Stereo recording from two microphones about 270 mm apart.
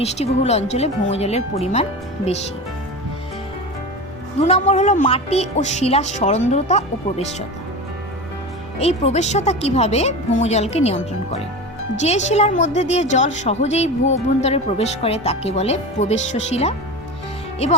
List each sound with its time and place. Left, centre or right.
0.0 s a woman's voice: left
4.4 s a woman's voice: left
8.8 s a woman's voice: left